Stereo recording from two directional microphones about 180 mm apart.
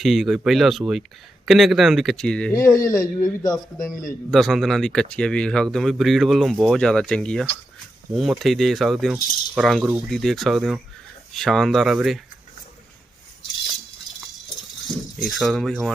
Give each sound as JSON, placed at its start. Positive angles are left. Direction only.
{"t": 0.0, "sound": "speech", "side_deg": 0}
{"t": 2.7, "sound": "speech", "side_deg": 20}
{"t": 3.8, "sound": "a man's voice", "side_deg": 45}
{"t": 4.3, "sound": "speech", "side_deg": 0}
{"t": 15.2, "sound": "speech", "side_deg": 0}